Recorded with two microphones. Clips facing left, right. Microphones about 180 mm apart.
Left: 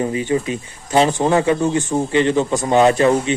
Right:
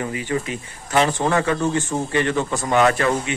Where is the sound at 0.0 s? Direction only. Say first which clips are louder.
Left 5 dB; 25° left (ahead or behind).